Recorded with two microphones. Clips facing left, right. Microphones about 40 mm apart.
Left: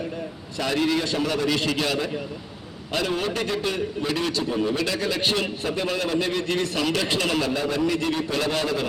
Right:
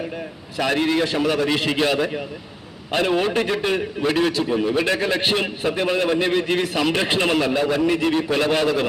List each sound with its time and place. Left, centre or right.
0.7 s a man's voice: right
4.3 s a man's voice: centre
4.9 s a man's voice: right